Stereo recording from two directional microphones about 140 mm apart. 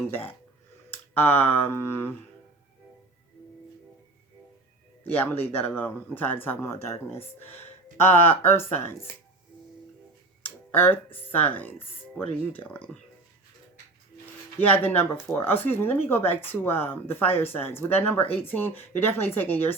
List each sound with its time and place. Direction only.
0.9 s speech: 15° left (ahead or behind)
5.0 s speech: 15° left (ahead or behind)
10.7 s speech: 15° left (ahead or behind)
14.6 s speech: 15° left (ahead or behind)